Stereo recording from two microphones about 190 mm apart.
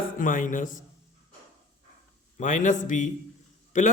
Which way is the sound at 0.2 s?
45° left (ahead or behind).